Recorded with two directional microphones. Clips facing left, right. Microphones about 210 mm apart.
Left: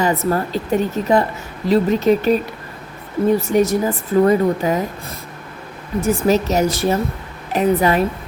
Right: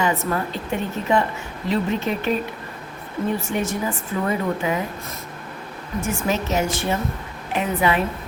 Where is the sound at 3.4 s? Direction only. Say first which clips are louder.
Left 8 dB; 40° left (ahead or behind).